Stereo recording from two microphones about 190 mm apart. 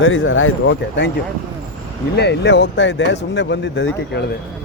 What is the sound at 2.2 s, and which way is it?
Speech, 65° left (ahead or behind).